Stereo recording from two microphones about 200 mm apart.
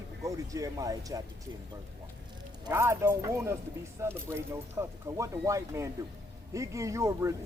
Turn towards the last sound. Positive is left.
turn(degrees=-15)  # may be behind; listen again after turning